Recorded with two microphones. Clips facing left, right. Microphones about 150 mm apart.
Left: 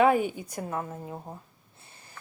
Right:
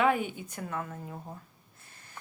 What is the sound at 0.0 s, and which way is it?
A woman's voice, 40° left (ahead or behind).